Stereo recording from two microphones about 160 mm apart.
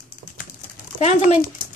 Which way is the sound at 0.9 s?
45° left (ahead or behind).